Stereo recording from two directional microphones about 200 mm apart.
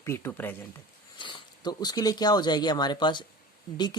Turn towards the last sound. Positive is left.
turn(degrees=20)  # may be behind; listen again after turning